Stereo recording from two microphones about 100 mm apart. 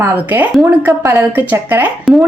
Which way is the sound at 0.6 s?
20° right (ahead or behind).